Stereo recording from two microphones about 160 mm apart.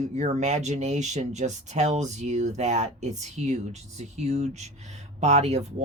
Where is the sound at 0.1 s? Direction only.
45° right (ahead or behind).